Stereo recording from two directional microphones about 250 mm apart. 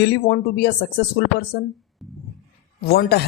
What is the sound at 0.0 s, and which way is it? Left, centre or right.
Speech, left.